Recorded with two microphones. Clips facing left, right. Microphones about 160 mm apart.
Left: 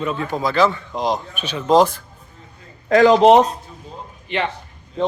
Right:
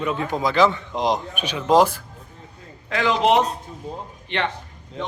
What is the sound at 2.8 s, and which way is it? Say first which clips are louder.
Speech: left 8 dB; 45° left (ahead or behind).